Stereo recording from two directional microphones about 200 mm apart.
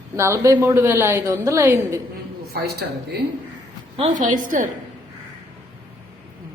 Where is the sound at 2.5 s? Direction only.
55° right (ahead or behind).